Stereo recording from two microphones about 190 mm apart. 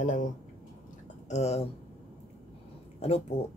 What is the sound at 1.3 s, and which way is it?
Speech, 35° left (ahead or behind).